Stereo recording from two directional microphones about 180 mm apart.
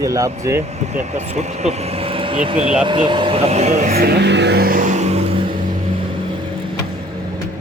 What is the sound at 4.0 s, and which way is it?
Vehicle, 65° right (ahead or behind).